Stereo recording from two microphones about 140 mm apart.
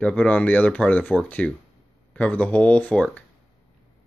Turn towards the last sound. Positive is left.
turn(degrees=10)  # may be behind; listen again after turning